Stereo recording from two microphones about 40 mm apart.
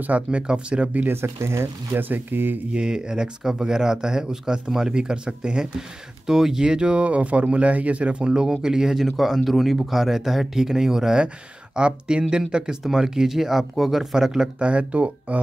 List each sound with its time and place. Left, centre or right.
0.3 s speech: right
1.1 s speech: right
2.0 s speech: right
2.7 s speech: right
8.3 s speech: centre
8.9 s speech: centre
11.7 s speech: right
14.6 s speech: right